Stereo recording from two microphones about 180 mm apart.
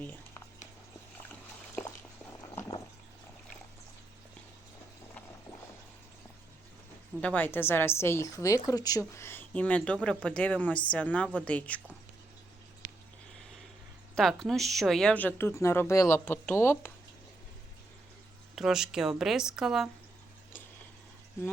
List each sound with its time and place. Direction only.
2.6 s a sound: 25° left (ahead or behind)
7.2 s speech: 10° left (ahead or behind)
14.2 s speech: centre (ahead or behind)
18.5 s speech: centre (ahead or behind)